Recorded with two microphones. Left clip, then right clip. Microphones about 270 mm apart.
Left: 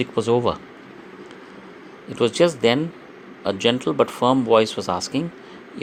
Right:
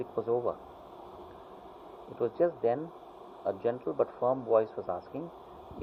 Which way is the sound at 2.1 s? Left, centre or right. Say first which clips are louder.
Left 11 dB; left.